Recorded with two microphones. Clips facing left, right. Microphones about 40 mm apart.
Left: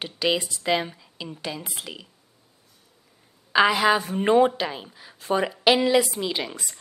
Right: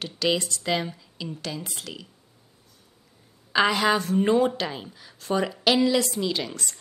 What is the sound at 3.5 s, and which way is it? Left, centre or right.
A woman's voice, centre.